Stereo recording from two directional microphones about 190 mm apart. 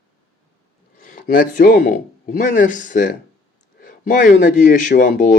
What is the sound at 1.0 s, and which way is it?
A man's voice, 50° left (ahead or behind).